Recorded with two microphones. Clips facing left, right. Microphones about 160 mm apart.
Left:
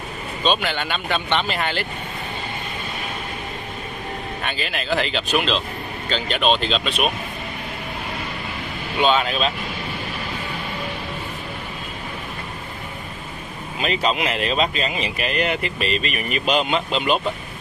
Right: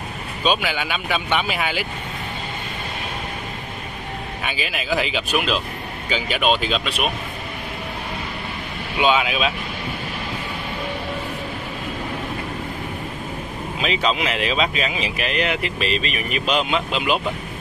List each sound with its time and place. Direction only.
0.4 s speech: 5° right (ahead or behind)
4.4 s speech: 5° right (ahead or behind)
8.9 s speech: 5° right (ahead or behind)
13.7 s speech: centre (ahead or behind)